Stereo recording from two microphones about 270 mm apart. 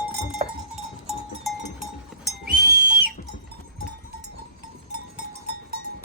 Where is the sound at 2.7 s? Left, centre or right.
Right.